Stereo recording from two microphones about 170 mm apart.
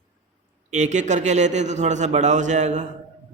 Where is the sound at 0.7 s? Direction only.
45° right (ahead or behind).